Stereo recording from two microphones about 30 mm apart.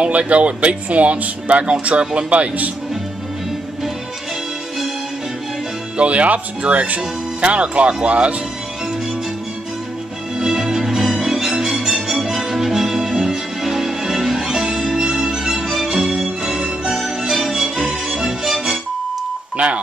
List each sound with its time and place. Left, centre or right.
0.0 s speech: right
0.8 s speech: right
1.6 s speech: right
5.9 s speech: right
10.4 s music: centre
19.5 s a sound: right